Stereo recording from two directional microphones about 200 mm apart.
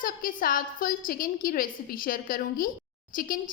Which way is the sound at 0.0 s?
45° left (ahead or behind).